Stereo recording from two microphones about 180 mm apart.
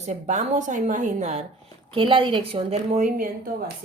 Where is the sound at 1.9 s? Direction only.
30° right (ahead or behind); by 3.7 s 50° right (ahead or behind).